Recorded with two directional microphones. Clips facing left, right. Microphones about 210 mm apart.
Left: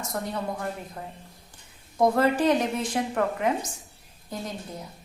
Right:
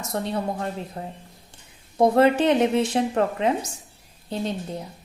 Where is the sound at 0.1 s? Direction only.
30° right (ahead or behind).